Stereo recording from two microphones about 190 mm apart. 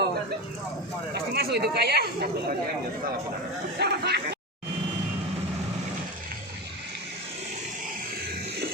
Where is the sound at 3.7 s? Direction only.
60° right (ahead or behind).